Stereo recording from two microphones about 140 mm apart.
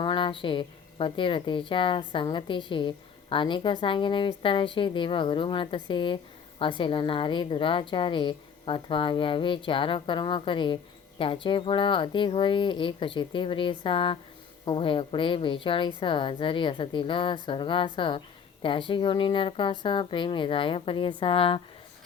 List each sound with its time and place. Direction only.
0.0 s a woman's voice: 35° left (ahead or behind)